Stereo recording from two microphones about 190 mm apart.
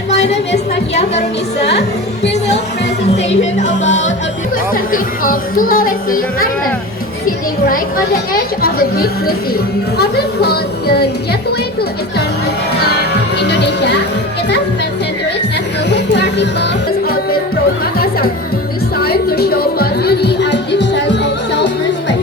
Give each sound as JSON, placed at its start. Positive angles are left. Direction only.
{"t": 0.2, "sound": "music", "side_deg": 35}
{"t": 3.0, "sound": "speech", "side_deg": 35}
{"t": 7.7, "sound": "speech", "side_deg": 50}
{"t": 12.8, "sound": "speech", "side_deg": 60}
{"t": 15.9, "sound": "music", "side_deg": 65}
{"t": 17.9, "sound": "speech", "side_deg": 50}
{"t": 18.9, "sound": "music", "side_deg": 55}